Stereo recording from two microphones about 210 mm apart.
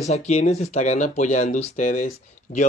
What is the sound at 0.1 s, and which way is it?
Speech, 30° left (ahead or behind).